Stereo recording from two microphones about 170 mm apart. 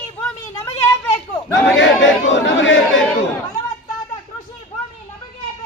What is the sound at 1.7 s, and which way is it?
Chatter, 90° left.